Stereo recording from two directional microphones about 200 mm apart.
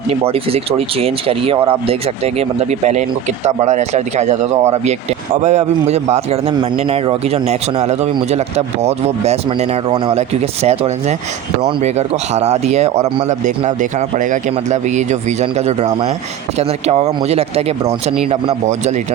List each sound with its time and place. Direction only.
0.1 s speech: 30° right (ahead or behind)